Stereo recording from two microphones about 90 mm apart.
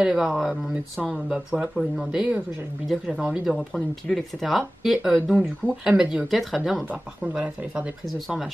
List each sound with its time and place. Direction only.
0.0 s speech: 5° right (ahead or behind)
6.9 s speech: 15° right (ahead or behind)